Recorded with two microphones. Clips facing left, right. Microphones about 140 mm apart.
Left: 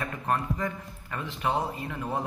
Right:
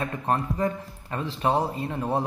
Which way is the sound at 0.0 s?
30° right (ahead or behind).